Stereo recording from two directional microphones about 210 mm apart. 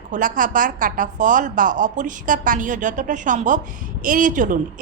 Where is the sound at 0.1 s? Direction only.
40° right (ahead or behind).